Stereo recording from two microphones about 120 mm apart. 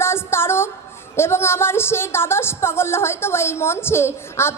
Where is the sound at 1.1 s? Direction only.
20° left (ahead or behind).